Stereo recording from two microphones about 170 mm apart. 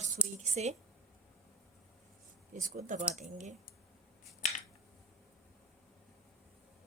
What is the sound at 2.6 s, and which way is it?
Speech, 50° right (ahead or behind).